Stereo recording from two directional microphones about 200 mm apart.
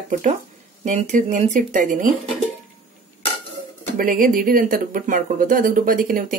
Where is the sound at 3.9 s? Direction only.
45° right (ahead or behind).